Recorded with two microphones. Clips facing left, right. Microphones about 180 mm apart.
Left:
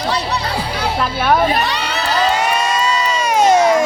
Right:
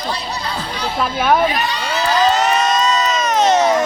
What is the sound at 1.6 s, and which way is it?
Crowd, 70° left (ahead or behind).